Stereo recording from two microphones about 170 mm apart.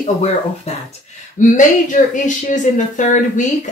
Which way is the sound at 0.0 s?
40° left (ahead or behind).